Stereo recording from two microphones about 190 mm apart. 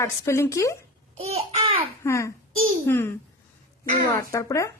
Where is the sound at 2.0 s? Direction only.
15° left (ahead or behind).